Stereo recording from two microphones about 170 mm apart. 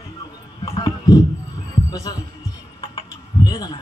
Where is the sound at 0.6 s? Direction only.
25° left (ahead or behind).